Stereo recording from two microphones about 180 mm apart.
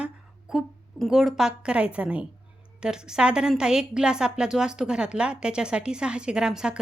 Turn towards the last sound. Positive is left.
turn(degrees=-5)  # may be behind; listen again after turning